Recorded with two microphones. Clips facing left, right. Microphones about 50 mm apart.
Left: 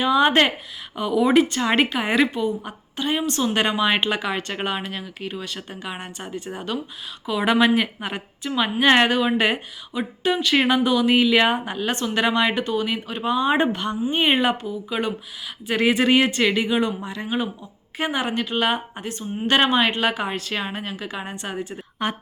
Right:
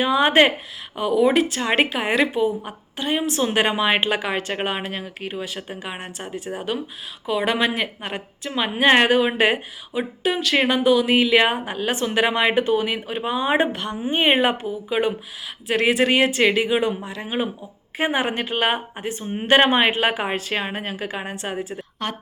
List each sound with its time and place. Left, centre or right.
0.0 s a woman's voice: centre
10.4 s a woman's voice: centre
14.1 s a woman's voice: centre
15.6 s a woman's voice: centre
17.2 s a woman's voice: centre
19.2 s speech: right
19.5 s a woman's voice: right; by 21.8 s centre
22.0 s a woman's voice: centre